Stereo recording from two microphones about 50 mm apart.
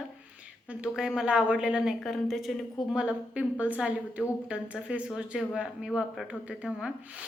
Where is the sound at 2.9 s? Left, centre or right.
Right.